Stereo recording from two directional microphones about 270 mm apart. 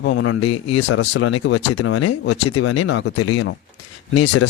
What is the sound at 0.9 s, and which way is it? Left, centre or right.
A man's voice, left.